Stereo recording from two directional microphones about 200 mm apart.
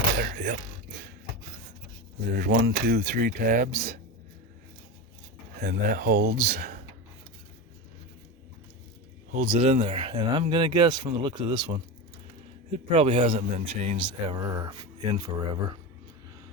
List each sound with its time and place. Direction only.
0.2 s speech: 40° right (ahead or behind)
2.4 s speech: 55° right (ahead or behind)
5.5 s speech: 50° right (ahead or behind)
9.3 s speech: 30° right (ahead or behind)